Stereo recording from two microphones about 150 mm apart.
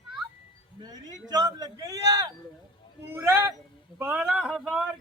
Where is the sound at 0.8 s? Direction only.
25° right (ahead or behind).